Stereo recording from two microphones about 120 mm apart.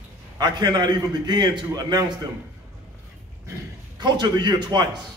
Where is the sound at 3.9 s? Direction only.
35° right (ahead or behind).